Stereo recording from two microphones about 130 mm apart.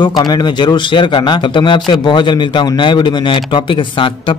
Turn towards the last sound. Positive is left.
turn(degrees=40)  # may be behind; listen again after turning